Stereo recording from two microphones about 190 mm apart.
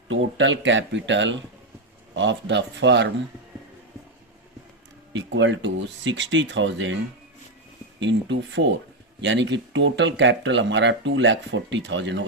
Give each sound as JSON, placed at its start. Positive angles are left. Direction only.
{"t": 0.1, "sound": "speech", "side_deg": -85}
{"t": 5.1, "sound": "speech", "side_deg": -75}
{"t": 7.9, "sound": "speech", "side_deg": -70}